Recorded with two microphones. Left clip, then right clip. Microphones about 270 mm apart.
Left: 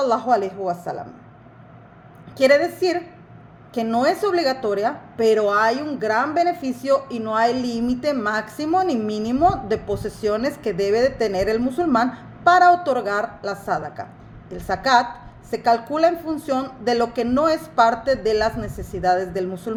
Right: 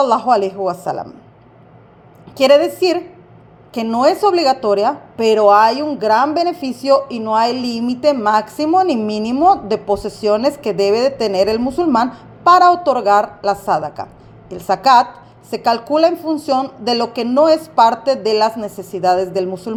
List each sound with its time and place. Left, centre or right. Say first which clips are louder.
0.0 s a woman's voice: right 6 dB; centre
2.3 s a woman's voice: right 5 dB; centre
6.1 s a woman's voice: right 5 dB; centre
6.7 s a woman's voice: right 6 dB; centre